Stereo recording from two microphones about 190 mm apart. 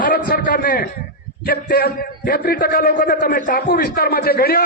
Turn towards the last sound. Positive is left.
turn(degrees=55)  # may be behind; listen again after turning